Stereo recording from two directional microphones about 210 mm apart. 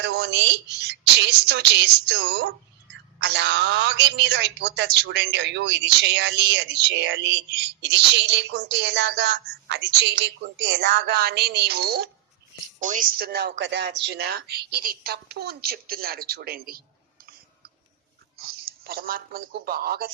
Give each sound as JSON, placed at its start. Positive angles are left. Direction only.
{"t": 0.0, "sound": "a woman's voice", "side_deg": -55}
{"t": 18.4, "sound": "speech", "side_deg": -45}